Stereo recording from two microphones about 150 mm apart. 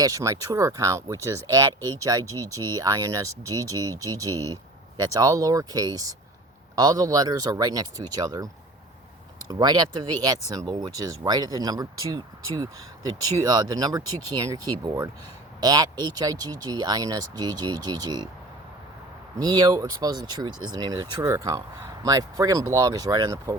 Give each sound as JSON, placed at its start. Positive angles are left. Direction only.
{"t": 0.0, "sound": "speech", "side_deg": -20}
{"t": 9.5, "sound": "speech", "side_deg": -30}
{"t": 19.4, "sound": "speech", "side_deg": -25}